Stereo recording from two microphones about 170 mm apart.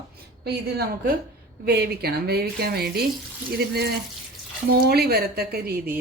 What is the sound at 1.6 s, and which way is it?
A woman's voice, 70° right (ahead or behind).